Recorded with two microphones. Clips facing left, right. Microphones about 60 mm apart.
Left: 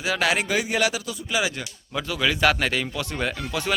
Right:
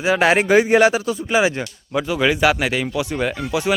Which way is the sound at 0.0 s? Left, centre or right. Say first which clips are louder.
Right 7 dB; right.